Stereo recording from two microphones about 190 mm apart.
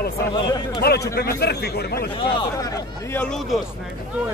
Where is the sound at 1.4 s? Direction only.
60° left (ahead or behind).